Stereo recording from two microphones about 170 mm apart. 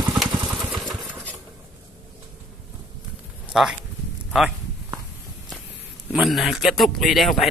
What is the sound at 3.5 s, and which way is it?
Speech, centre (ahead or behind).